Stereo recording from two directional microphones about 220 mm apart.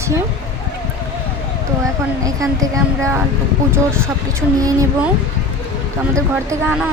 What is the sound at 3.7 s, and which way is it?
Speech, 10° right (ahead or behind).